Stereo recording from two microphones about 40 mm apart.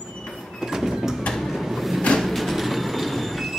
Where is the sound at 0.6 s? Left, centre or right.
Centre.